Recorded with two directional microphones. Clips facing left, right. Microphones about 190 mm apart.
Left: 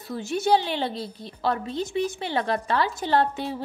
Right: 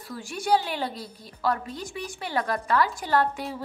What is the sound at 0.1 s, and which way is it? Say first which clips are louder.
A woman's voice: left 3 dB; 25° left (ahead or behind).